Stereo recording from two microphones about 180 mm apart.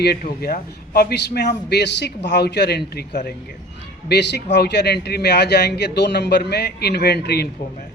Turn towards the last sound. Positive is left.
turn(degrees=65)  # may be behind; listen again after turning